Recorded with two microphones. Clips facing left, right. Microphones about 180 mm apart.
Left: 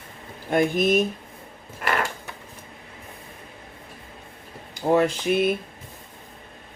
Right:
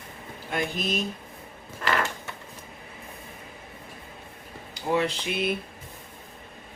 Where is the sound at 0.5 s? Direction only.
50° left (ahead or behind).